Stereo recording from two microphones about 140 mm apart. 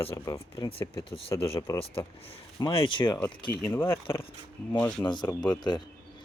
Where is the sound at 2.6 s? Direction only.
40° left (ahead or behind).